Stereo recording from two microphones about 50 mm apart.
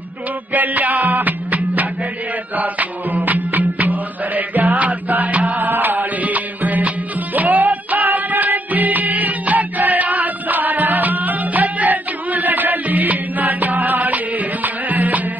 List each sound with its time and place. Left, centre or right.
0.5 s music: right
5.6 s music: right